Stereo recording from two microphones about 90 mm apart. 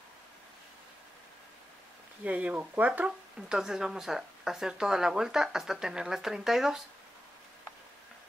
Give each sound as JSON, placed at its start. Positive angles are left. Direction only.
{"t": 2.2, "sound": "speech", "side_deg": -15}
{"t": 3.4, "sound": "speech", "side_deg": -5}